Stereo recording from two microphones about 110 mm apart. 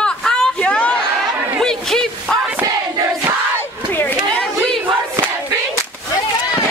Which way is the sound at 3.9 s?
20° left (ahead or behind).